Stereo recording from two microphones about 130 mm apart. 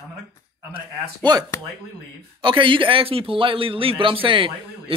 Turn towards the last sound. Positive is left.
turn(degrees=-45)  # may be behind; listen again after turning